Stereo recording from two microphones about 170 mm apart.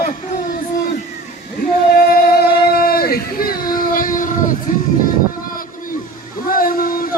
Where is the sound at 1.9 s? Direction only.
65° left (ahead or behind).